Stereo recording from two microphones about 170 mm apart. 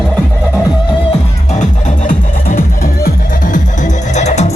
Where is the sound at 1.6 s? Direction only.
50° left (ahead or behind).